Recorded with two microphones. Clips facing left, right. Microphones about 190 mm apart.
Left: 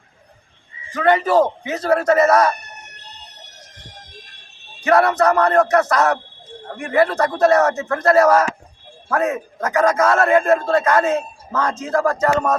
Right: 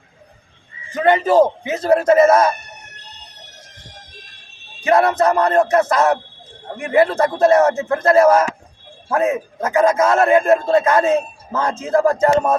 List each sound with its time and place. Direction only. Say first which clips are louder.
0.9 s a man's voice: right 2 dB; 20° right (ahead or behind)
4.8 s a man's voice: even; 20° right (ahead or behind)